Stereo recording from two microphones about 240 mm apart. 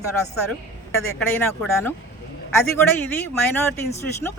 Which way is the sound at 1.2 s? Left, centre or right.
Centre.